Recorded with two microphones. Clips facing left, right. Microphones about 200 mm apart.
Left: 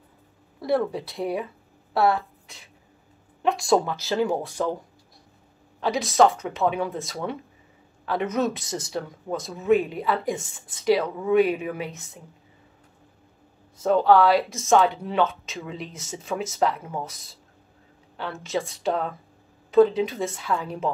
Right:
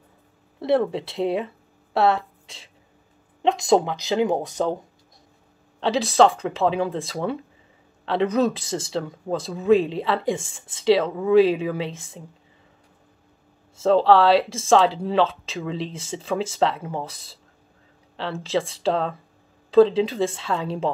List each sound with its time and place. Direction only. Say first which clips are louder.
0.6 s speech: right 3 dB; 25° right (ahead or behind)
5.8 s speech: right 2 dB; 30° right (ahead or behind)
13.7 s speech: right 2 dB; 30° right (ahead or behind)